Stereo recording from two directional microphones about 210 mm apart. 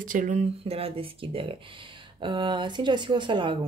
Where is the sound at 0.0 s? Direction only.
40° right (ahead or behind).